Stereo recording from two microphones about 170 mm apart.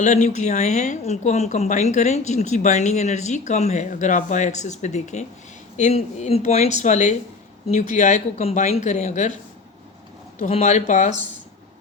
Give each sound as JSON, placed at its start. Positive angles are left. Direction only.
{"t": 0.0, "sound": "speech", "side_deg": 45}
{"t": 10.4, "sound": "speech", "side_deg": 40}